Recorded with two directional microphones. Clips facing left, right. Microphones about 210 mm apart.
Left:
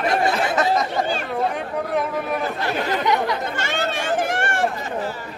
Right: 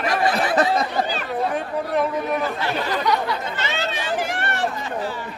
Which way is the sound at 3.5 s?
50° left (ahead or behind).